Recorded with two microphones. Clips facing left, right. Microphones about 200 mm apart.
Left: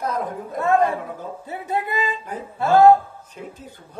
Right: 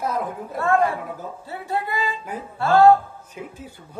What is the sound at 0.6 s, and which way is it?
Music, 20° left (ahead or behind).